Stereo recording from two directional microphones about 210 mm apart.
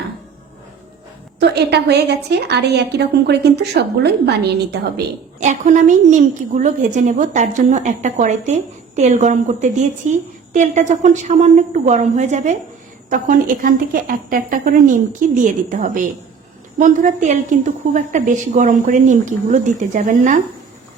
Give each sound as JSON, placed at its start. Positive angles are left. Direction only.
{"t": 1.4, "sound": "a woman's voice", "side_deg": -55}
{"t": 5.4, "sound": "a woman's voice", "side_deg": -35}